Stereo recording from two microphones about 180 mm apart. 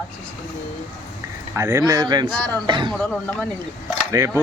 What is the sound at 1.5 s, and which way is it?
Speech, 15° right (ahead or behind).